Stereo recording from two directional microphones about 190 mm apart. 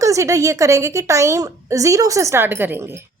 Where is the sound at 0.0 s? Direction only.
15° right (ahead or behind).